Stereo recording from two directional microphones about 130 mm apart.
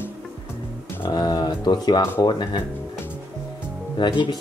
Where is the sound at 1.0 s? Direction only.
35° left (ahead or behind).